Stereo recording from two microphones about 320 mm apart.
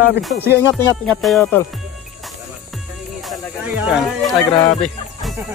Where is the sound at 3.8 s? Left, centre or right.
Centre.